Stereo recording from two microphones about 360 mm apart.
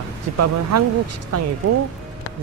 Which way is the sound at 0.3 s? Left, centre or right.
Right.